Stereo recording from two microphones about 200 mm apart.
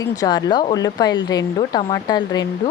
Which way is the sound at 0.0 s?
20° left (ahead or behind).